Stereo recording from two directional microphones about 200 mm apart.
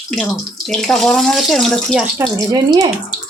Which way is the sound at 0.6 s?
Centre (ahead or behind).